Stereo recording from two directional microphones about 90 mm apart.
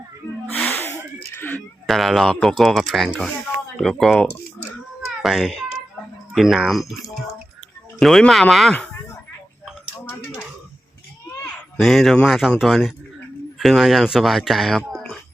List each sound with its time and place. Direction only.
0.4 s music: 15° left (ahead or behind)
1.3 s cat: 20° left (ahead or behind)
1.9 s speech: centre (ahead or behind)
11.8 s speech: centre (ahead or behind)